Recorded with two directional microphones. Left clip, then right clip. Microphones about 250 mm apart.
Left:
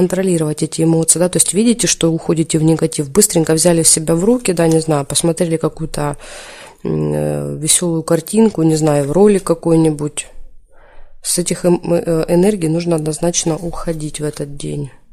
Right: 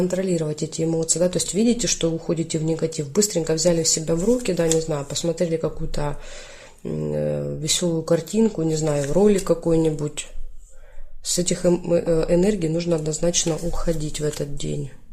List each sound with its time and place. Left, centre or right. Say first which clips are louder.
0.0 s speech: left 7 dB; left
11.3 s speech: left 5 dB; left